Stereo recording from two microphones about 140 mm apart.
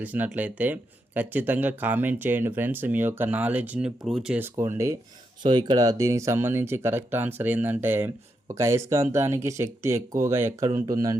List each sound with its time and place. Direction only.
0.0 s speech: 10° right (ahead or behind)
4.4 s speech: 15° right (ahead or behind)
5.4 s speech: 35° right (ahead or behind); by 10.7 s 20° right (ahead or behind)